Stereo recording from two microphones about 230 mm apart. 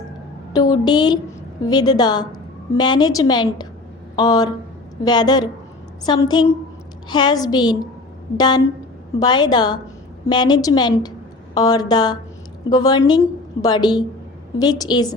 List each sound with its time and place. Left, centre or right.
0.5 s a woman's voice: centre